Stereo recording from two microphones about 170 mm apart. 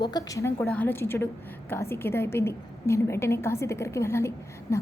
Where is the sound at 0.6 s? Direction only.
10° left (ahead or behind).